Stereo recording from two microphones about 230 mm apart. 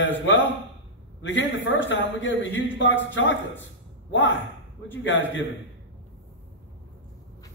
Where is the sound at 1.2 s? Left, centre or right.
Left.